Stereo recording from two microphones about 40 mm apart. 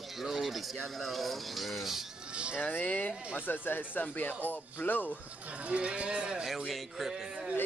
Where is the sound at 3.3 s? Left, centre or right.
Left.